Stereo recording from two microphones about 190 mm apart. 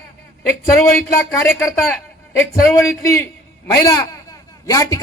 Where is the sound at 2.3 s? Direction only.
15° left (ahead or behind).